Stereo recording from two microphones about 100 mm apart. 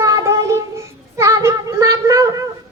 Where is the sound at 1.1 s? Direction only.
30° right (ahead or behind).